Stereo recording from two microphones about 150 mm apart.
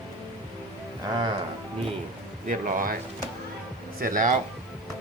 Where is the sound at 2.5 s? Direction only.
65° right (ahead or behind).